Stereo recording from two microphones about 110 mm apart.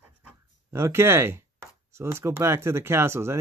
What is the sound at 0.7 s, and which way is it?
Speech, 25° right (ahead or behind).